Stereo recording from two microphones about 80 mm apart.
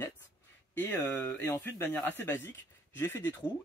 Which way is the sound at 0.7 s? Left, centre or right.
Left.